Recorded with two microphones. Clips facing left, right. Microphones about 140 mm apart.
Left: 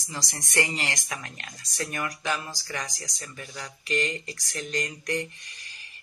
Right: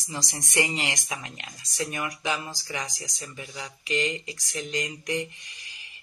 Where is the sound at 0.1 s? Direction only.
20° right (ahead or behind).